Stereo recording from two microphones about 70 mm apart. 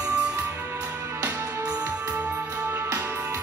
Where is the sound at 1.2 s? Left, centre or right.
Right.